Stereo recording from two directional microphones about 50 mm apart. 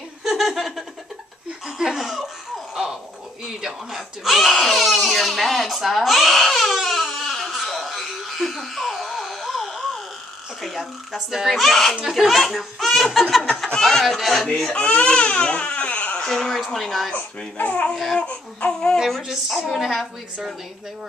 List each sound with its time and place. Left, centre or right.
0.2 s laughter: centre
2.7 s a sound: centre
3.4 s baby cry: centre
10.6 s speech: centre
14.5 s speech: centre
16.3 s baby cry: centre
16.6 s speech: centre
17.1 s speech: left
18.1 s baby cry: left
19.2 s speech: centre